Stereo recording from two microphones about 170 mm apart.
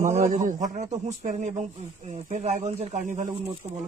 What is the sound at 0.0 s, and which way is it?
A man's voice, 45° right (ahead or behind).